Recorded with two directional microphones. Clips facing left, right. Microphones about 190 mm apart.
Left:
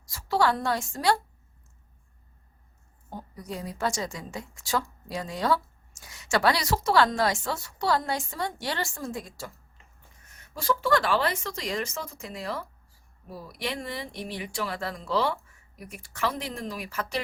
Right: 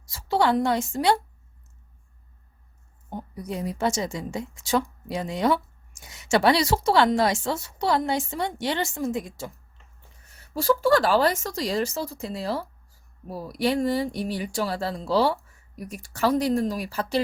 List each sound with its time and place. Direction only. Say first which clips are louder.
0.0 s a woman's voice: right 2 dB; 25° right (ahead or behind)
3.1 s a woman's voice: right 4 dB; 20° right (ahead or behind)
10.3 s speech: right 6 dB; 35° right (ahead or behind)